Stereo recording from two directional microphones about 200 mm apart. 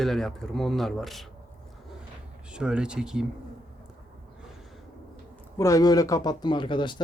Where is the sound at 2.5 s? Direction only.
5° right (ahead or behind).